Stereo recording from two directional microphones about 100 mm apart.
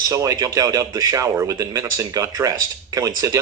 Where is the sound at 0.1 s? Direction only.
35° right (ahead or behind).